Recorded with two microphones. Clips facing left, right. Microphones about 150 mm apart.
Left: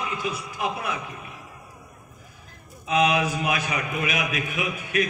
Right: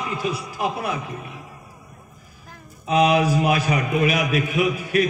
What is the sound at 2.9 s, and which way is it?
A man's voice, 35° right (ahead or behind).